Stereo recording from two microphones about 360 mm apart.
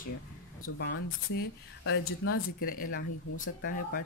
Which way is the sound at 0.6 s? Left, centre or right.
Left.